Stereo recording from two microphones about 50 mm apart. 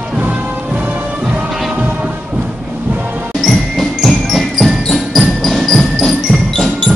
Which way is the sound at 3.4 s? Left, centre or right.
Centre.